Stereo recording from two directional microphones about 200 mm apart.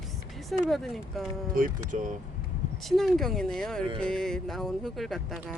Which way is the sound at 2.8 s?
Centre (ahead or behind).